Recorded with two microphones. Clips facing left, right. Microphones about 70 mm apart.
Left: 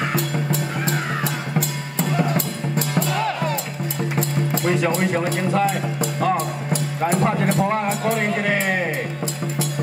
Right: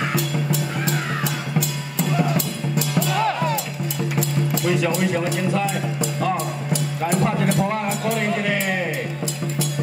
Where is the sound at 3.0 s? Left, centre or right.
Left.